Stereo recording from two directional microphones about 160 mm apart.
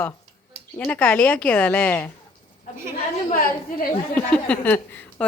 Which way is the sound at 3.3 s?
60° left (ahead or behind).